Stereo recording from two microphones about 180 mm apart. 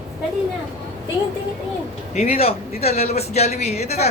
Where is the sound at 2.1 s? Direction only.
35° left (ahead or behind).